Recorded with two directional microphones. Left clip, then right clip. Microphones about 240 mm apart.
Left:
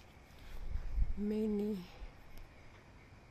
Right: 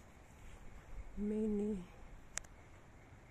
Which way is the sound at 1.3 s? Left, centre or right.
Centre.